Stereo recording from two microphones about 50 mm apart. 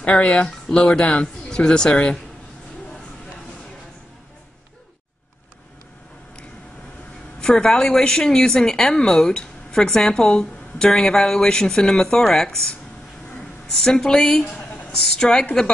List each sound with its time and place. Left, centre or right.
0.0 s speech: left
7.3 s speech: centre
14.6 s a sound: left
15.0 s a woman's voice: centre